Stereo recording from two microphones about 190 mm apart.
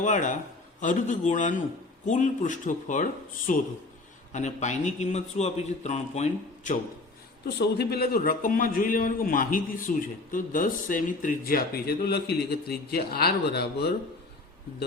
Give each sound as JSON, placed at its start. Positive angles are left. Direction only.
{"t": 0.0, "sound": "a man's voice", "side_deg": 40}
{"t": 7.4, "sound": "a man's voice", "side_deg": 60}